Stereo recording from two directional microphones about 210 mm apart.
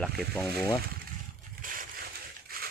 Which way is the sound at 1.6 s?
40° right (ahead or behind).